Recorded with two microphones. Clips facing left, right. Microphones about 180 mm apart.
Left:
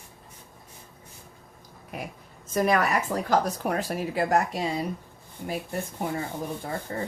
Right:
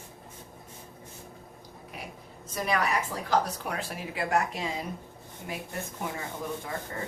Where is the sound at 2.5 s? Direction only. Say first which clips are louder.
Left 5 dB; 50° left (ahead or behind).